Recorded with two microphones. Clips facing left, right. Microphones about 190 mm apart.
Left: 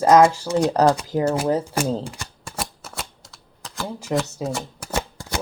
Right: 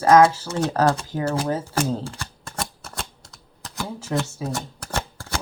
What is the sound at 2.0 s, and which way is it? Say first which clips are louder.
Shuffling cards: even; 15° left (ahead or behind).